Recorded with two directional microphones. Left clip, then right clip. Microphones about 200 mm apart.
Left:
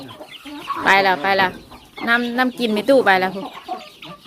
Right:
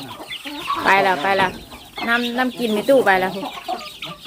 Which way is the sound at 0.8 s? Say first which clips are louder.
Left 1 dB; 25° left (ahead or behind).